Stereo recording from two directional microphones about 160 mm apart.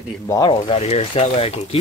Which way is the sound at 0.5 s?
35° left (ahead or behind).